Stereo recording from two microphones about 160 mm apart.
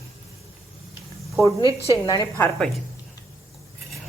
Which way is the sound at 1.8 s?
20° left (ahead or behind).